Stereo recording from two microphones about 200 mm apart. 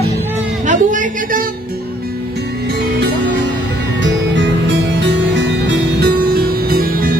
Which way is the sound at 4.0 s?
65° right (ahead or behind).